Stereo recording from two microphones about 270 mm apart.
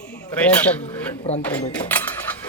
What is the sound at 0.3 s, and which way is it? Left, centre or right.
Speech, centre.